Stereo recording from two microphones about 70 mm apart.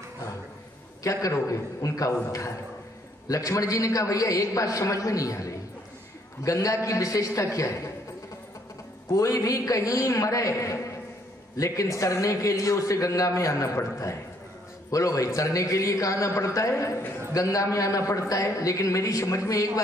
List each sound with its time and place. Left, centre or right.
1.0 s a man's voice: left
9.1 s a man's voice: left